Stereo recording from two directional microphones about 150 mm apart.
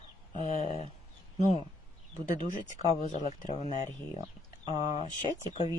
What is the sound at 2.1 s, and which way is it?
Speech, 55° left (ahead or behind).